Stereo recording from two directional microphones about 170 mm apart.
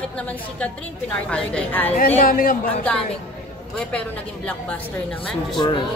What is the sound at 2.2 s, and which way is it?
Speech, 55° left (ahead or behind).